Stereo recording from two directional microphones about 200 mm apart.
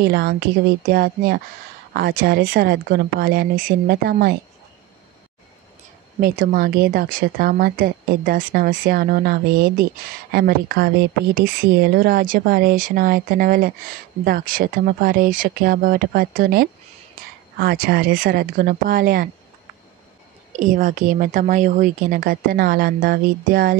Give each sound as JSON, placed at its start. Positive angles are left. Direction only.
{"t": 0.8, "sound": "speech", "side_deg": -50}
{"t": 6.2, "sound": "speech", "side_deg": -45}
{"t": 20.5, "sound": "speech", "side_deg": -40}